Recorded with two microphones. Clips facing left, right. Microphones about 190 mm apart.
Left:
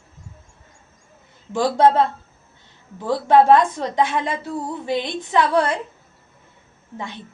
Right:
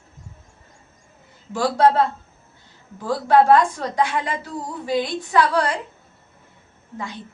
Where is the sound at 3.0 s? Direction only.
20° left (ahead or behind).